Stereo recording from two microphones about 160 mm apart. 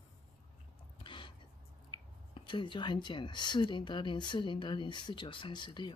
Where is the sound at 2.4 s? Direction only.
30° left (ahead or behind).